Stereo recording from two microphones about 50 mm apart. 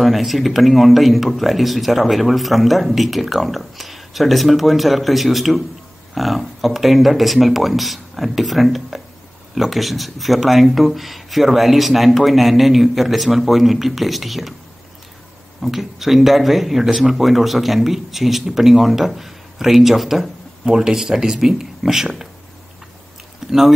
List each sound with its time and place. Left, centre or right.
0.0 s speech: centre
15.6 s speech: centre
23.4 s a sound: centre